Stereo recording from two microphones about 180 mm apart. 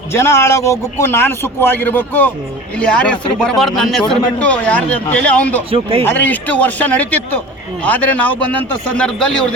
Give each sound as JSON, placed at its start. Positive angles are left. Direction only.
{"t": 0.1, "sound": "a man's voice", "side_deg": 15}
{"t": 5.7, "sound": "speech", "side_deg": -30}
{"t": 6.1, "sound": "a man's voice", "side_deg": 10}